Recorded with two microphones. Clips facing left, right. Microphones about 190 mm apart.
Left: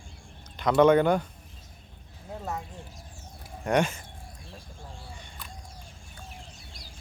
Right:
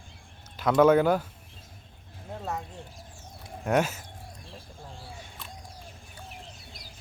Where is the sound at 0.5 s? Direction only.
5° right (ahead or behind).